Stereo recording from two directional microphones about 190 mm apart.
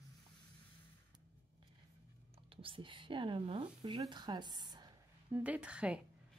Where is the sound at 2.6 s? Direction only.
25° right (ahead or behind).